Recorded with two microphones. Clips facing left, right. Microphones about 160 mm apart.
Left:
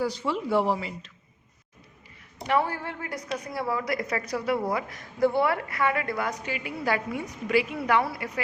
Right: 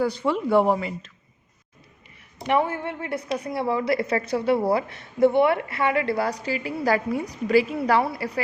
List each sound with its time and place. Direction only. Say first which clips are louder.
0.0 s speech: right 5 dB; 55° right (ahead or behind)
2.5 s a woman's voice: right 3 dB; 20° right (ahead or behind)